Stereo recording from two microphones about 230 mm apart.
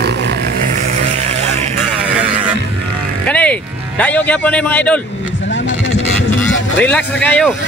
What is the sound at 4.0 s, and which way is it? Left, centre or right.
A man's voice, centre.